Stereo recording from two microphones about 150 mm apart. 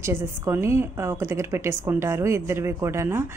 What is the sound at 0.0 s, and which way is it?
A woman's voice, 15° right (ahead or behind).